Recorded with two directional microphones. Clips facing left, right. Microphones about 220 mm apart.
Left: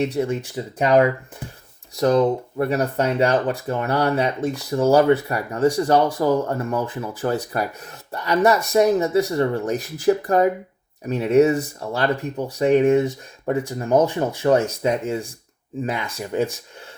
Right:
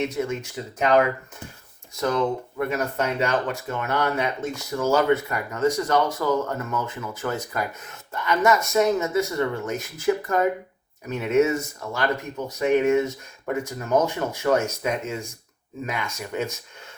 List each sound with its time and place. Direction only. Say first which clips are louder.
0.0 s speech: left 4 dB; 35° left (ahead or behind)
2.0 s speech: left 6 dB; 35° left (ahead or behind)